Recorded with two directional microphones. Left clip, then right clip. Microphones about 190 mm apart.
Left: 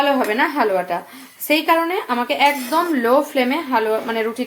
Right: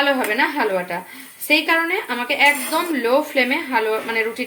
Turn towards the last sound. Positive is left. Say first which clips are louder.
# even
turn(degrees=20)  # may be behind; listen again after turning